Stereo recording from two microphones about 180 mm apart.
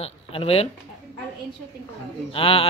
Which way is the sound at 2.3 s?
30° left (ahead or behind).